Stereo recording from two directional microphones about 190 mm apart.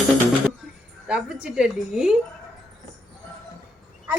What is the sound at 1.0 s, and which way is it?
Speech, 5° right (ahead or behind).